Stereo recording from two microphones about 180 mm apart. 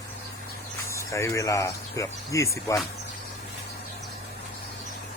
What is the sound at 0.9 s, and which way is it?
Speech, 15° left (ahead or behind).